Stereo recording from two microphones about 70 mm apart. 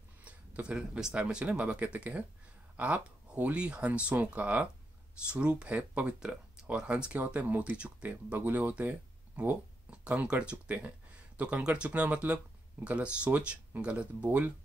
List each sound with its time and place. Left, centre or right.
0.2 s speech: centre